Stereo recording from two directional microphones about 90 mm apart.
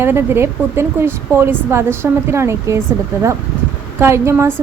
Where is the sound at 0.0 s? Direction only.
25° right (ahead or behind).